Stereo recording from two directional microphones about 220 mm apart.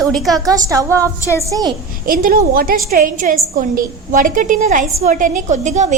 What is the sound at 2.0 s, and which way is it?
A woman's voice, 40° right (ahead or behind).